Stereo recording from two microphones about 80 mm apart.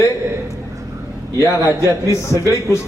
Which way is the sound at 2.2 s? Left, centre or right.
Left.